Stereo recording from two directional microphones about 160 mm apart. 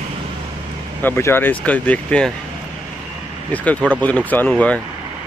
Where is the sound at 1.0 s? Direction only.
15° left (ahead or behind).